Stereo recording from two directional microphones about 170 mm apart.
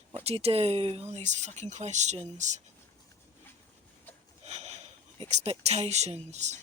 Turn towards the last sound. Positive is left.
turn(degrees=-40)  # may be behind; listen again after turning